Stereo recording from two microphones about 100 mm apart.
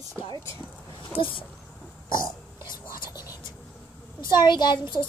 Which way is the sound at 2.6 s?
45° left (ahead or behind).